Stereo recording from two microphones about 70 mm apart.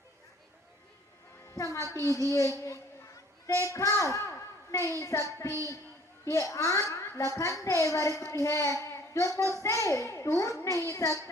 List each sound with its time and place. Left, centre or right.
1.5 s a child's voice: left
7.3 s a child's voice: left